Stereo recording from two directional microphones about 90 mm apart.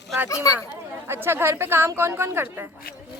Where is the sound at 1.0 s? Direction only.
25° right (ahead or behind).